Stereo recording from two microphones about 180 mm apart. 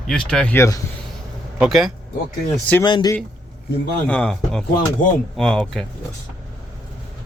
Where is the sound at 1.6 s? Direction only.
Centre (ahead or behind).